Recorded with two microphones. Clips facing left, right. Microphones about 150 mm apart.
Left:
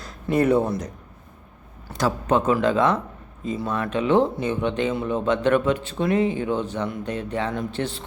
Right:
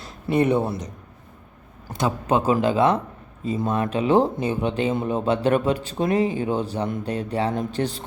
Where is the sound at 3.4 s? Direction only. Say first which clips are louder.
Right 2 dB; 40° right (ahead or behind).